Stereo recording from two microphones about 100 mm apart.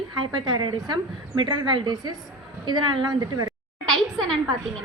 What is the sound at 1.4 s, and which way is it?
A woman's voice, 50° right (ahead or behind).